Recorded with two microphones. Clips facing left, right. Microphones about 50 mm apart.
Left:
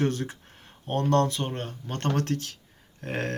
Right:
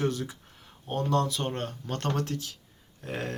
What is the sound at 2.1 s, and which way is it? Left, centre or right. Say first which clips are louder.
Speech: left 4 dB; left.